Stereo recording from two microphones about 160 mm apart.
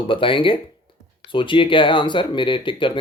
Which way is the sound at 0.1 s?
30° left (ahead or behind).